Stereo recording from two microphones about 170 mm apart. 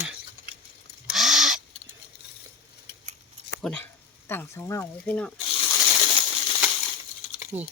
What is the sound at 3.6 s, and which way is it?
Speech, 10° left (ahead or behind).